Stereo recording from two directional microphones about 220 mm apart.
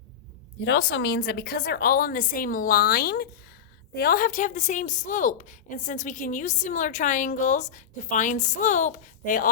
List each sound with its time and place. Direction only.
0.6 s a woman's voice: 55° left (ahead or behind); by 9.5 s 35° left (ahead or behind)